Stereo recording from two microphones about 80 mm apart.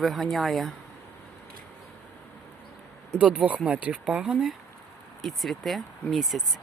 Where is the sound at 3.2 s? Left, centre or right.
Centre.